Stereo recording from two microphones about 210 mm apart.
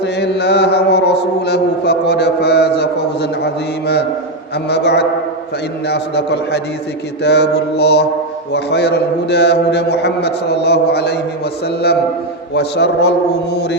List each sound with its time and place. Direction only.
0.0 s chant: 55° left (ahead or behind)
4.7 s a man's voice: 55° left (ahead or behind)
12.5 s a man's voice: 50° left (ahead or behind)